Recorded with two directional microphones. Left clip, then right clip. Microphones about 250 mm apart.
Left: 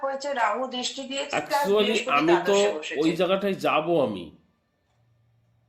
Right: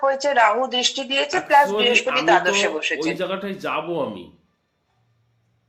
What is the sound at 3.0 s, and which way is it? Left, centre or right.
Speech, left.